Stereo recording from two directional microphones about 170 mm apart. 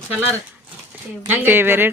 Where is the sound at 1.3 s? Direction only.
10° right (ahead or behind).